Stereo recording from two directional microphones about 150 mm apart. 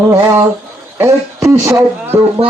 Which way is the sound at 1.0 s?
15° right (ahead or behind).